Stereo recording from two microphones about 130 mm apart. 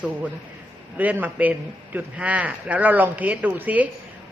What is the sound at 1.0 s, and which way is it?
A man's voice, 15° right (ahead or behind).